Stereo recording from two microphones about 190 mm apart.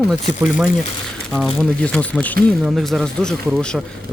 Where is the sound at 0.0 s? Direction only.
Centre (ahead or behind).